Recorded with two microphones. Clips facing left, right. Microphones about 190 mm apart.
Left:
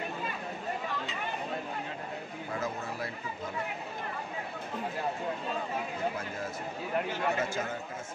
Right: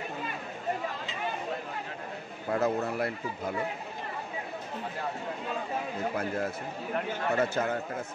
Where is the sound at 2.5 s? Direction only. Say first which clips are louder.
Right 8 dB; 60° right (ahead or behind).